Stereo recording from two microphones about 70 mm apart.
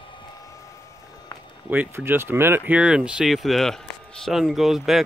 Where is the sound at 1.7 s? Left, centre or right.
Right.